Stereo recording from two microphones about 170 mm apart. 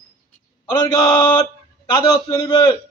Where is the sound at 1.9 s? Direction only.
25° left (ahead or behind).